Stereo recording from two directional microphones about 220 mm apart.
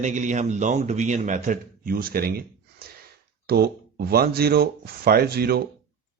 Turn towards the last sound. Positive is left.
turn(degrees=-45)  # may be behind; listen again after turning